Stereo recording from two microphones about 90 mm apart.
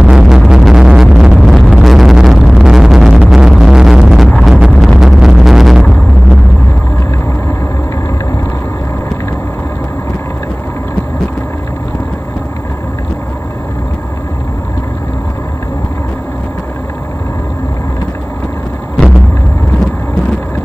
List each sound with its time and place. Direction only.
0.0 s music: 5° right (ahead or behind)